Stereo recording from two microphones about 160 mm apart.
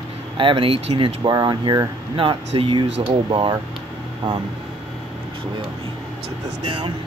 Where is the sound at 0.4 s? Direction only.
35° right (ahead or behind).